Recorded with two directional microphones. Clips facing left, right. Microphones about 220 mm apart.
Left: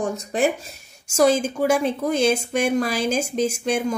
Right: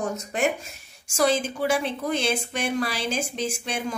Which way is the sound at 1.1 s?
45° left (ahead or behind).